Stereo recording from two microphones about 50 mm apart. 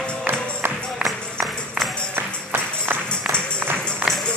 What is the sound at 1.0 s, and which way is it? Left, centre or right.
Music, centre.